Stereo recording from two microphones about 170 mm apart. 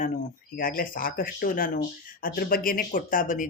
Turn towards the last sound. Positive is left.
turn(degrees=50)  # may be behind; listen again after turning